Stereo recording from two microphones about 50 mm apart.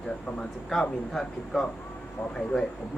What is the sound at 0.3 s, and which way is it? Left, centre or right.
Speech, centre.